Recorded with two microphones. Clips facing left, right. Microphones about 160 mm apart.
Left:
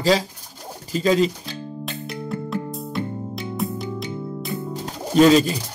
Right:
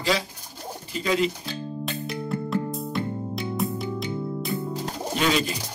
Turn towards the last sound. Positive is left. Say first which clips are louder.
# left 10 dB
turn(degrees=35)  # may be behind; listen again after turning